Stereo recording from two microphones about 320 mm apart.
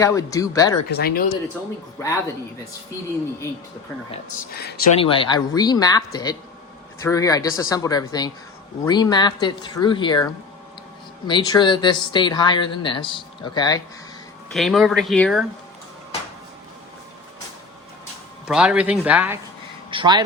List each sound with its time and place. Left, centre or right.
0.0 s speech: centre
0.9 s speech: left
2.0 s speech: centre
4.1 s speech: left
7.0 s speech: centre
11.3 s speech: centre
14.5 s speech: centre
18.4 s speech: centre
19.9 s speech: centre